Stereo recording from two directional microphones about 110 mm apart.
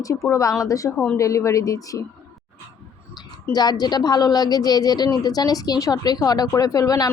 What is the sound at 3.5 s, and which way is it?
Speech, 40° left (ahead or behind).